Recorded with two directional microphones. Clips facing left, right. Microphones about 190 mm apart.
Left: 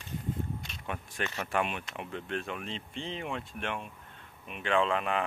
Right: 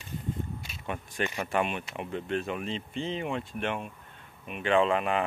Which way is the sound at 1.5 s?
Centre (ahead or behind).